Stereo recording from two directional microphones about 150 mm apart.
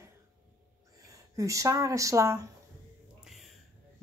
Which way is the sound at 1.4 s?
20° right (ahead or behind).